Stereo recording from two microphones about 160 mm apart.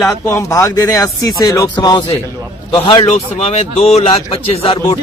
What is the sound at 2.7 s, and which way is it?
A man's voice, 35° left (ahead or behind).